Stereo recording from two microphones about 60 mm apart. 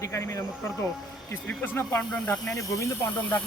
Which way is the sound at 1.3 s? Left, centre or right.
Left.